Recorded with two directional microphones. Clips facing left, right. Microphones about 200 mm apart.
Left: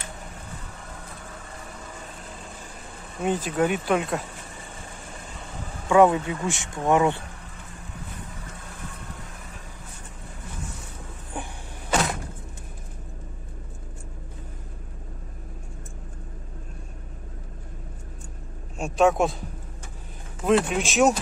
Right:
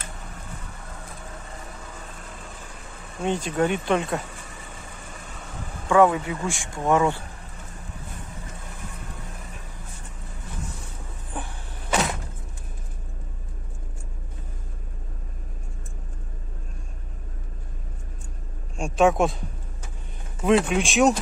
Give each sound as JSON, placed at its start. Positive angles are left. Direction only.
{"t": 3.2, "sound": "speech", "side_deg": 5}
{"t": 5.9, "sound": "speech", "side_deg": 15}
{"t": 11.3, "sound": "power windows", "side_deg": 10}
{"t": 18.8, "sound": "a man's voice", "side_deg": 0}
{"t": 20.4, "sound": "speech", "side_deg": 0}